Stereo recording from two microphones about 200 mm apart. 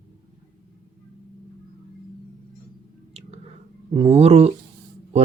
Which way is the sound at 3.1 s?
30° right (ahead or behind).